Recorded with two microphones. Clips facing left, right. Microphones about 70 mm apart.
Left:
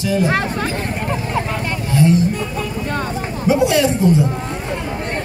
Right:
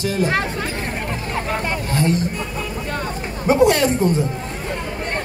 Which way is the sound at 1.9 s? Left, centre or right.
Right.